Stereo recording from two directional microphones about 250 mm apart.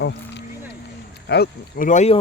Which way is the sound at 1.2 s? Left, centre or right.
Left.